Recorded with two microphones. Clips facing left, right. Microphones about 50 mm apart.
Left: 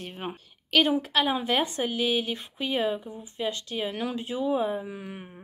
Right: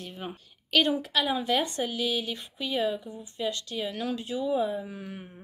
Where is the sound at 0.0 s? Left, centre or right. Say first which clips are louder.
Left 3 dB; left.